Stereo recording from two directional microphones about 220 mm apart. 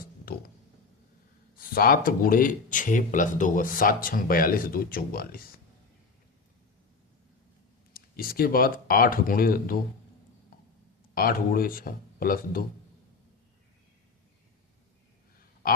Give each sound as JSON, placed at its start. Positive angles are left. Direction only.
{"t": 0.3, "sound": "a sound", "side_deg": 45}
{"t": 1.5, "sound": "speech", "side_deg": 40}
{"t": 7.9, "sound": "speech", "side_deg": 40}
{"t": 11.1, "sound": "speech", "side_deg": 40}